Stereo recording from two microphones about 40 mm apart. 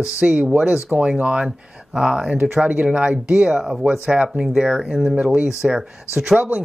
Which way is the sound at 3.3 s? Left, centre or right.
Centre.